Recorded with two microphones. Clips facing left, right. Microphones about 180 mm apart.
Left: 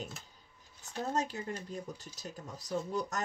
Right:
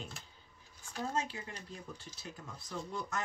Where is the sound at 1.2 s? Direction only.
45° left (ahead or behind).